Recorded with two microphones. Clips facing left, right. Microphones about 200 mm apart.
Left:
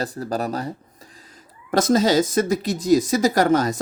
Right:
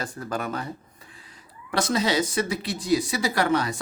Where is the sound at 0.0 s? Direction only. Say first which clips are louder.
Left 5 dB; 35° left (ahead or behind).